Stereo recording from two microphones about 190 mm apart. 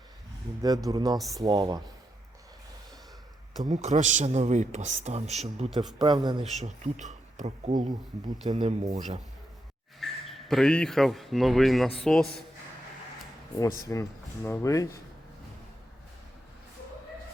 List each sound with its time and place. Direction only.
0.6 s speech: 20° right (ahead or behind)
3.7 s speech: 40° right (ahead or behind)
6.0 s speech: 25° right (ahead or behind)
6.4 s speech: 35° right (ahead or behind)
10.0 s a man's voice: centre (ahead or behind)
13.8 s speech: 15° left (ahead or behind)